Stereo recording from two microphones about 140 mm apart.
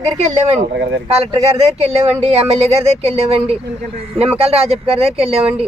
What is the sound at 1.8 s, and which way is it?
Speech, 45° right (ahead or behind).